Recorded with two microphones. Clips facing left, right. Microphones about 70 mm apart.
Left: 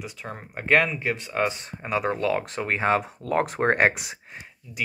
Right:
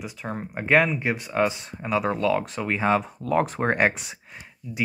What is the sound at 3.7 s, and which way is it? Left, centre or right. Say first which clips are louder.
Speech: left 1 dB; centre.